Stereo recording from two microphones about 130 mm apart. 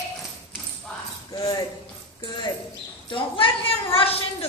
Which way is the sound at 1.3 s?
30° left (ahead or behind).